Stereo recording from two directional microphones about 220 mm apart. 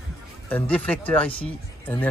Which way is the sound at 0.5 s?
5° left (ahead or behind).